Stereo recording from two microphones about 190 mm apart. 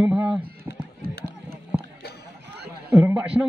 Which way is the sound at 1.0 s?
50° right (ahead or behind).